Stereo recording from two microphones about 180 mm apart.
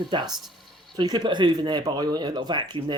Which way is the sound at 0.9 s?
25° right (ahead or behind).